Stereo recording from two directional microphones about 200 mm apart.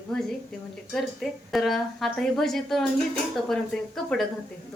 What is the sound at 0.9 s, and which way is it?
A woman's voice, centre (ahead or behind).